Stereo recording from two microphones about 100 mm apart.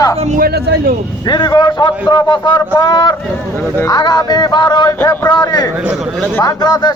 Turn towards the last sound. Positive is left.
turn(degrees=40)  # may be behind; listen again after turning